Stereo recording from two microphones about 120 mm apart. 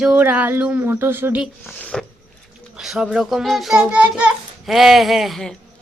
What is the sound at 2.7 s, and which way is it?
A woman's voice, 5° right (ahead or behind).